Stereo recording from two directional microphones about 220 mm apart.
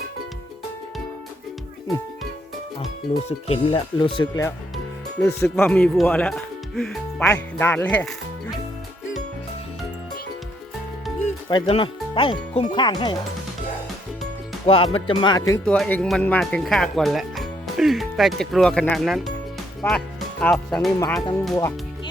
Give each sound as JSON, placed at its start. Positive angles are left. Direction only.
{"t": 3.2, "sound": "speech", "side_deg": 25}
{"t": 5.5, "sound": "speech", "side_deg": 5}
{"t": 11.4, "sound": "speech", "side_deg": 20}
{"t": 14.7, "sound": "speech", "side_deg": 25}
{"t": 21.5, "sound": "music", "side_deg": 15}